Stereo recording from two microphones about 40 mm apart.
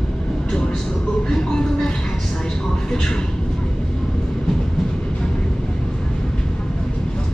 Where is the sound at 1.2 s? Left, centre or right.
Centre.